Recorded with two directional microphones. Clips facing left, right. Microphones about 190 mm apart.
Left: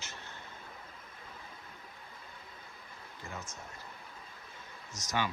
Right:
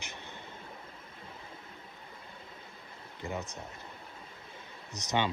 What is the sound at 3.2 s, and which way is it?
Speech, 20° right (ahead or behind).